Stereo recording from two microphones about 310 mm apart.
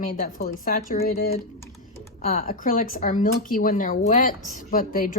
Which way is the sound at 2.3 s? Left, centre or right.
Left.